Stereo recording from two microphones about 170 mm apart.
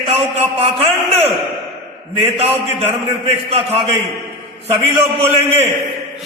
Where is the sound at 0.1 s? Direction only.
35° right (ahead or behind).